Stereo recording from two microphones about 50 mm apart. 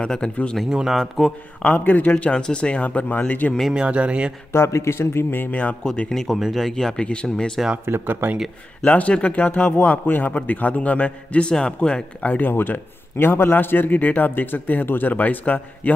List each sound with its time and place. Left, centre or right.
0.0 s a man's voice: centre
0.7 s speech: centre
0.9 s speech: centre
1.6 s a man's voice: left
3.7 s speech: right
4.5 s speech: left
5.5 s a man's voice: left
6.0 s speech: centre
6.7 s speech: centre
7.8 s speech: right
8.8 s a man's voice: left
12.3 s a man's voice: left